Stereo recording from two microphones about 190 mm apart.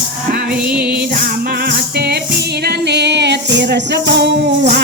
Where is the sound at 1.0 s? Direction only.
50° right (ahead or behind).